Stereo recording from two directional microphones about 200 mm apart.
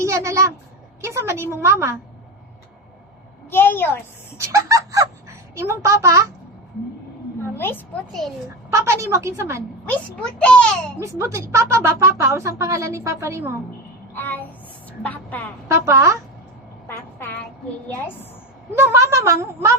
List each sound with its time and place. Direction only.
0.0 s a sound: 15° right (ahead or behind)
1.0 s speech: 15° right (ahead or behind)
3.5 s a child's voice: 10° left (ahead or behind)
4.4 s speech: 15° right (ahead or behind)
7.5 s a child's voice: 10° left (ahead or behind)
8.7 s speech: 15° right (ahead or behind)
9.9 s a child's voice: 5° left (ahead or behind)
11.0 s speech: 15° right (ahead or behind)
14.1 s child singing: 10° left (ahead or behind)
15.0 s a child's voice: 10° left (ahead or behind)
15.7 s speech: 15° right (ahead or behind)
16.8 s a woman's voice: 10° left (ahead or behind)
18.8 s speech: 10° right (ahead or behind)